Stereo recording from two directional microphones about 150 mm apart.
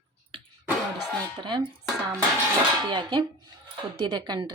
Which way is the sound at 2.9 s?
30° right (ahead or behind).